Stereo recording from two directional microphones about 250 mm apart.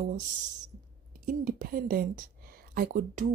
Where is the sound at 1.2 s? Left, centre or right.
Right.